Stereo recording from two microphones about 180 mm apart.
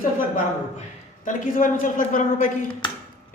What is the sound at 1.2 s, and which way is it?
A woman's voice, 50° left (ahead or behind).